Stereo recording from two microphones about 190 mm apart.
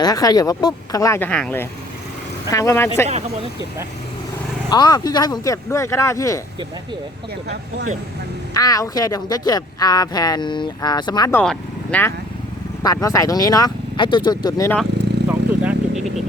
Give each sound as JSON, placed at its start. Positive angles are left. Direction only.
{"t": 0.0, "sound": "speech", "side_deg": 20}
{"t": 4.7, "sound": "speech", "side_deg": 20}
{"t": 8.5, "sound": "speech", "side_deg": 20}
{"t": 11.3, "sound": "speech", "side_deg": 5}
{"t": 12.8, "sound": "speech", "side_deg": 20}
{"t": 15.3, "sound": "vehicle", "side_deg": -5}